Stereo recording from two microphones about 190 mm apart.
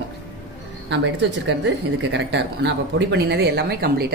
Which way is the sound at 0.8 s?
70° right (ahead or behind).